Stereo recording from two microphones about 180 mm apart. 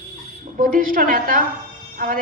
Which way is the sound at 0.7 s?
50° right (ahead or behind).